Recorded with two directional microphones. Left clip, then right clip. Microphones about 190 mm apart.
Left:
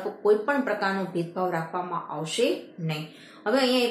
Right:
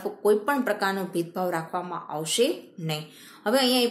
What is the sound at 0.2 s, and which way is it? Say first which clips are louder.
Speech: even; 50° right (ahead or behind).